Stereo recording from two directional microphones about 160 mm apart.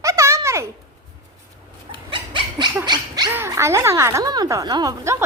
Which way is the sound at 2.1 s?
30° right (ahead or behind).